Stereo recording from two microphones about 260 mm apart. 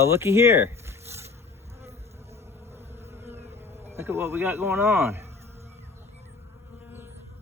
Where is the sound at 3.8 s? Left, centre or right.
Centre.